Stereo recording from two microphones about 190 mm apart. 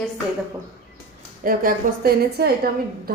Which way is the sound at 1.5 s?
50° right (ahead or behind).